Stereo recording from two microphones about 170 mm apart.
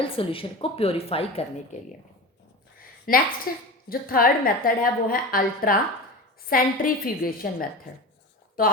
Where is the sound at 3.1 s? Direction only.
60° left (ahead or behind).